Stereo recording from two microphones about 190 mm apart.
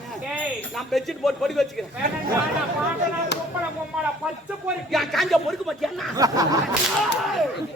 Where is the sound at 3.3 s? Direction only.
65° left (ahead or behind).